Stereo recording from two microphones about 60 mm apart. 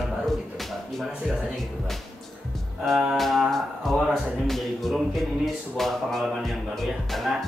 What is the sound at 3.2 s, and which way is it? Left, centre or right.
Speech, centre.